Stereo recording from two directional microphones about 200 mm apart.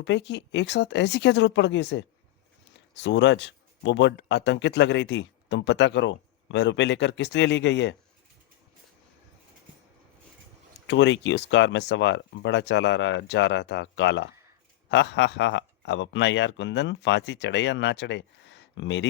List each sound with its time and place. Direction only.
0.0 s speech: 60° left (ahead or behind)
10.8 s speech: 65° left (ahead or behind)